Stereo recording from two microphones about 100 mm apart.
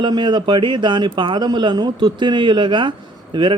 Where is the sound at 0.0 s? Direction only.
50° right (ahead or behind).